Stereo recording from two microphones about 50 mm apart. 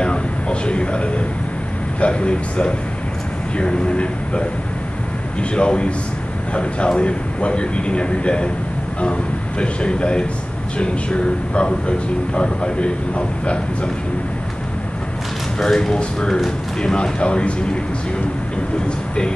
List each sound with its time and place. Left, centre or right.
0.0 s a sound: left
2.0 s a man's voice: left
5.5 s a man's voice: left
9.6 s a man's voice: left
15.6 s a man's voice: centre